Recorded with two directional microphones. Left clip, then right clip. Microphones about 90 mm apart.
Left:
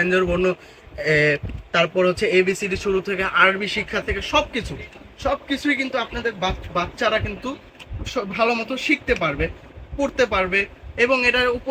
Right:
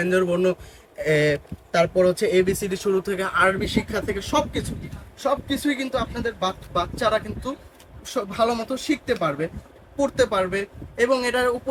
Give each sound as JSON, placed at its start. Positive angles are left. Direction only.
{"t": 0.0, "sound": "speech", "side_deg": -20}
{"t": 1.7, "sound": "speech", "side_deg": -5}
{"t": 10.2, "sound": "speech", "side_deg": -40}